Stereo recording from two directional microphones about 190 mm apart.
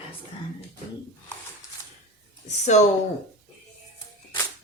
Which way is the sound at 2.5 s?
40° left (ahead or behind).